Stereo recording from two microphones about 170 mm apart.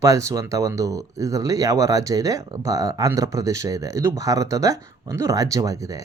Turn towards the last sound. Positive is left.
turn(degrees=-20)  # may be behind; listen again after turning